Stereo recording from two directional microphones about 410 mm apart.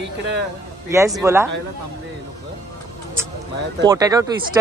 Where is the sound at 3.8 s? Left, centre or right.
Centre.